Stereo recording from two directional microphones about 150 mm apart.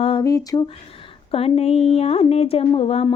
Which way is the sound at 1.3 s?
40° left (ahead or behind).